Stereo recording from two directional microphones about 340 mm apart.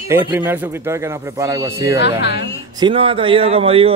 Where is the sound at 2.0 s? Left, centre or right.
Left.